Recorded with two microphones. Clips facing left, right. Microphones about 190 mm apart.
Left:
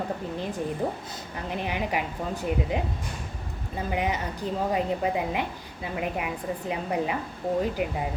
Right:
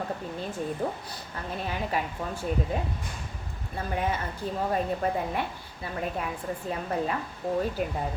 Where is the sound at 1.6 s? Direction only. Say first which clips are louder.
Left 1 dB; 15° left (ahead or behind).